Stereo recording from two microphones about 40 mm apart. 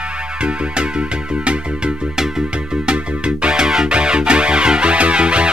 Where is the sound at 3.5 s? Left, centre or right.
Centre.